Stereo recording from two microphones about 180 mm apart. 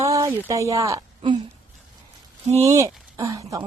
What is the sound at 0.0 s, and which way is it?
Speech, 15° right (ahead or behind).